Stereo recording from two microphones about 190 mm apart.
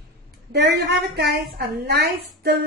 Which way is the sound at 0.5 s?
60° right (ahead or behind).